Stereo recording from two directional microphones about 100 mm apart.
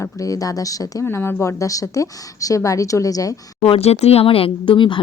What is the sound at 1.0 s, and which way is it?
A woman's voice, 20° left (ahead or behind).